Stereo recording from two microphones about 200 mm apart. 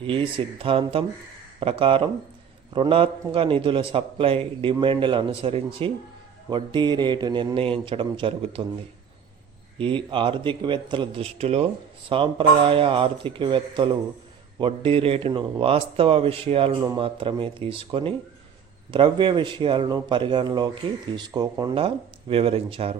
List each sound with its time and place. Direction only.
0.0 s speech: 25° right (ahead or behind)
9.7 s speech: 25° right (ahead or behind)